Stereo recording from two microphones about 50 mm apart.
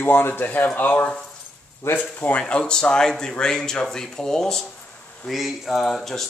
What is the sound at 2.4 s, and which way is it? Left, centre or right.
Speech, centre.